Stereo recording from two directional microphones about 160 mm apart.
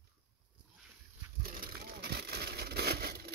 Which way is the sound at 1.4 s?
65° right (ahead or behind).